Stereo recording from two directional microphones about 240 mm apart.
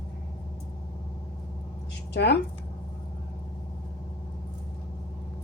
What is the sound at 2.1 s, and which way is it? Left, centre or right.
Speech, left.